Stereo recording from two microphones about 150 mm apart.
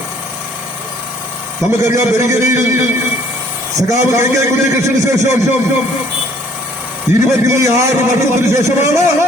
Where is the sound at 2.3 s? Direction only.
20° right (ahead or behind).